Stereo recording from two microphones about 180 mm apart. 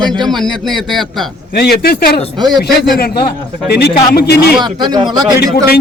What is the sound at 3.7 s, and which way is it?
Speech, 65° left (ahead or behind).